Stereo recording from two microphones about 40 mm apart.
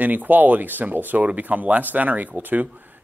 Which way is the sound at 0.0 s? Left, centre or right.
Right.